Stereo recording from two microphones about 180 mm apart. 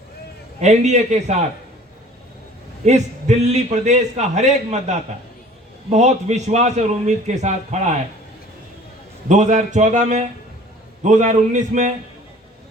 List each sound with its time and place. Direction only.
0.6 s a man's voice: 40° right (ahead or behind)
2.8 s a man's voice: 40° right (ahead or behind)
9.3 s speech: 40° right (ahead or behind)